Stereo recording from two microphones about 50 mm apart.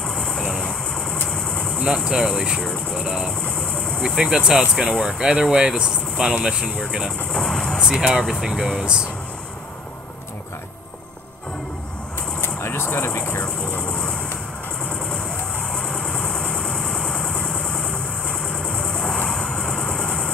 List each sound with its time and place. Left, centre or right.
0.0 s vehicle: centre
1.3 s engine: centre
2.0 s speech: centre
3.5 s vehicle: centre
4.0 s speech: centre
7.3 s vehicle: centre
7.8 s speech: centre
12.4 s vehicle: left
15.7 s vehicle: centre